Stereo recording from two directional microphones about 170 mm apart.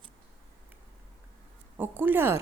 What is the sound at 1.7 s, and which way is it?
Speech, 10° right (ahead or behind).